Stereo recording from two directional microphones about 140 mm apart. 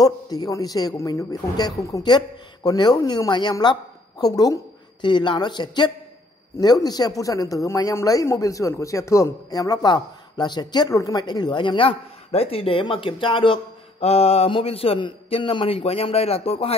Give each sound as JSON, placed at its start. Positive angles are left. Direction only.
{"t": 0.0, "sound": "a woman's voice", "side_deg": 25}